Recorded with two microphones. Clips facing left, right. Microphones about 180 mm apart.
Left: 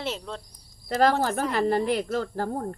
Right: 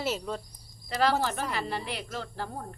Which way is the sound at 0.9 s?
45° left (ahead or behind).